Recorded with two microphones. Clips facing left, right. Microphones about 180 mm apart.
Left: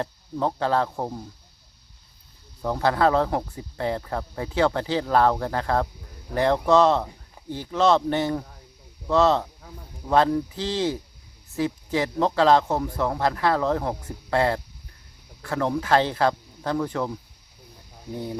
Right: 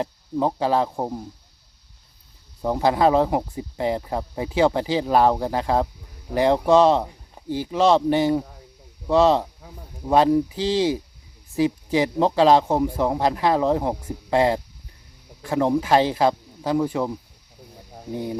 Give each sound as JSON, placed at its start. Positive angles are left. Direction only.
{"t": 0.0, "sound": "speech", "side_deg": -15}
{"t": 2.6, "sound": "speech", "side_deg": -15}
{"t": 18.1, "sound": "speech", "side_deg": -15}